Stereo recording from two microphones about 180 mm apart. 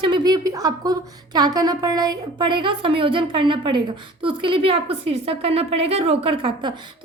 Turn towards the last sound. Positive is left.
turn(degrees=-30)  # may be behind; listen again after turning